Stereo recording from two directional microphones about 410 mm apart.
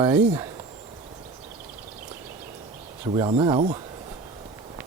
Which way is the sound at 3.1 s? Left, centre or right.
Centre.